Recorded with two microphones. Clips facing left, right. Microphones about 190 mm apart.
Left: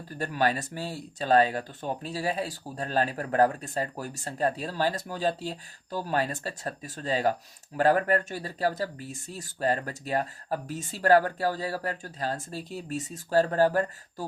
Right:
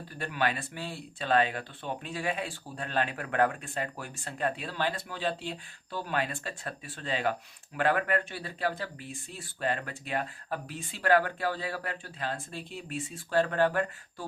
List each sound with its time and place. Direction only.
0.2 s speech: 40° left (ahead or behind)